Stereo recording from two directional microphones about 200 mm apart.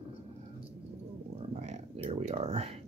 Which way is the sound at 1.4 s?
30° right (ahead or behind).